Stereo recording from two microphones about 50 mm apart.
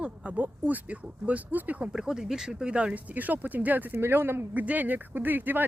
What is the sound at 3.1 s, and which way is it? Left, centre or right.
Speech, right.